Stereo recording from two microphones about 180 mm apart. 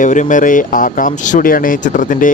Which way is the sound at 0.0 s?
45° left (ahead or behind).